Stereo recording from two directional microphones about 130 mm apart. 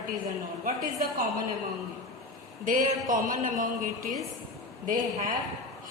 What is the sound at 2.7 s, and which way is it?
Speech, 85° right.